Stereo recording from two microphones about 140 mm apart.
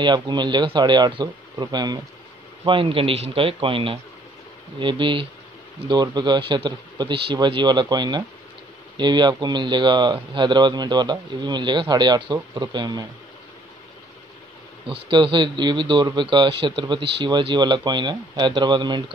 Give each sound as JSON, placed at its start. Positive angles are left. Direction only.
{"t": 0.0, "sound": "speech", "side_deg": -30}
{"t": 14.9, "sound": "speech", "side_deg": -35}